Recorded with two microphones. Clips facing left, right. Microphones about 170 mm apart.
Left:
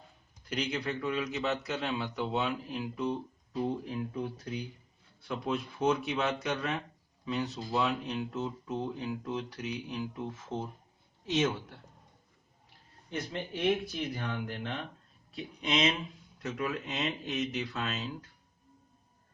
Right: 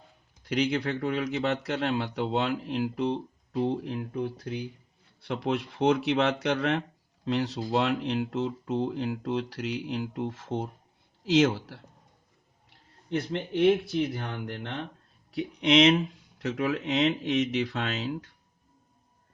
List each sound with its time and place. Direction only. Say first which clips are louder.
0.4 s speech: right 7 dB; 70° right (ahead or behind)
5.2 s speech: right 4 dB; 70° right (ahead or behind)
13.1 s speech: right 7 dB; 70° right (ahead or behind)